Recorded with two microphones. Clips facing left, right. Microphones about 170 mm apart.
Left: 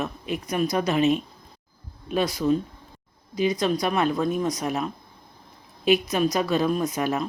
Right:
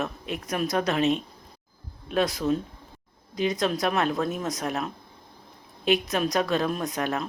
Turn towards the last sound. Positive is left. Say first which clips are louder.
# left 3 dB
turn(degrees=0)  # may be behind; listen again after turning